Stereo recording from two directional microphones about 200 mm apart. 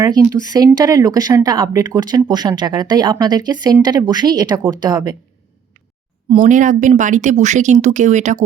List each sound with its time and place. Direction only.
0.0 s speech: 20° right (ahead or behind)
6.4 s speech: 40° right (ahead or behind)